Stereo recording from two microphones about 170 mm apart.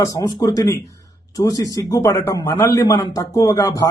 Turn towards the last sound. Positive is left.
turn(degrees=20)  # may be behind; listen again after turning